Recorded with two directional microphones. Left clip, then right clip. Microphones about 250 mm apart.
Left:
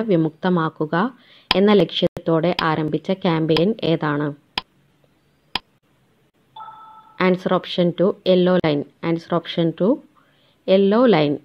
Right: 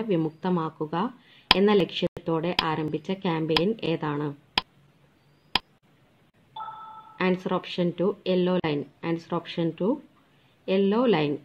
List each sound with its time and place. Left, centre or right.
0.0 s speech: left
4.6 s tick: centre
5.5 s a sound: centre
7.2 s speech: left